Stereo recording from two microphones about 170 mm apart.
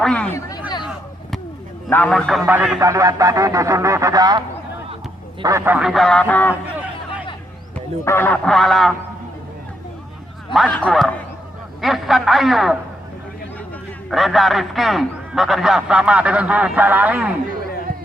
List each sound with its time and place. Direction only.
0.0 s speech: 5° left (ahead or behind)
1.9 s a man's voice: 5° left (ahead or behind)
2.5 s a man's voice: 10° right (ahead or behind); by 6.6 s 10° left (ahead or behind)
8.0 s a man's voice: 15° left (ahead or behind)
10.5 s a man's voice: centre (ahead or behind)
14.1 s a man's voice: centre (ahead or behind)